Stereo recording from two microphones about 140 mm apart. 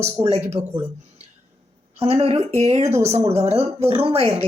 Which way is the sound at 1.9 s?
50° right (ahead or behind).